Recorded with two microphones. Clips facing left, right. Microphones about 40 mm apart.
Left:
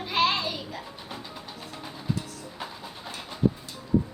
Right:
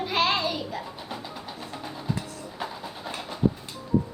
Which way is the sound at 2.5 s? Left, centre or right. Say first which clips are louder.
Right 5 dB; centre.